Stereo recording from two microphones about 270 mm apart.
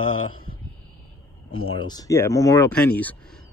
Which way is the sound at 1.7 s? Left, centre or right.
Centre.